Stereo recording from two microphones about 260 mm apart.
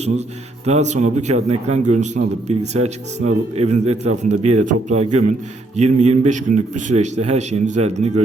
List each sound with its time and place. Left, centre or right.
0.6 s a man's voice: right